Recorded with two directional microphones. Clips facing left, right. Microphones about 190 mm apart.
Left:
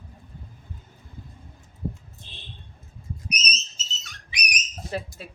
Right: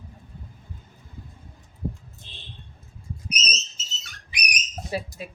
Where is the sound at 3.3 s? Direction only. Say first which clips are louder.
Even; 25° right (ahead or behind).